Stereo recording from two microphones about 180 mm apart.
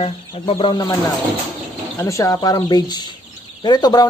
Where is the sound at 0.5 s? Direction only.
25° left (ahead or behind).